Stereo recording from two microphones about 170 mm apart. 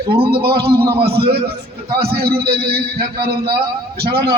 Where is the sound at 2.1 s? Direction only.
65° right (ahead or behind).